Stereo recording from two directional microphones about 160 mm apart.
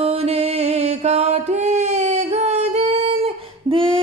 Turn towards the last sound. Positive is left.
turn(degrees=-30)  # may be behind; listen again after turning